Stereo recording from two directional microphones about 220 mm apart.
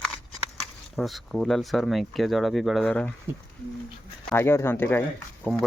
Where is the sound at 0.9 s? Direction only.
Centre (ahead or behind).